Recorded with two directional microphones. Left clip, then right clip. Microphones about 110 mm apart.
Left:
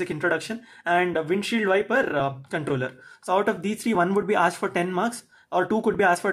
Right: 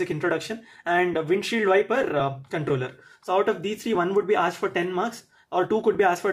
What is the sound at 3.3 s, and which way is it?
Speech, 45° left (ahead or behind).